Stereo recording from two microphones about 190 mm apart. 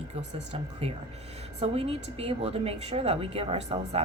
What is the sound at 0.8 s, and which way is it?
Speech, 30° right (ahead or behind).